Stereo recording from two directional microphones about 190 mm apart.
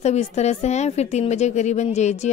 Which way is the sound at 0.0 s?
35° left (ahead or behind).